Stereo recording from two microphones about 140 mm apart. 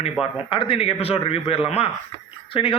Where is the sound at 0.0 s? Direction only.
40° left (ahead or behind).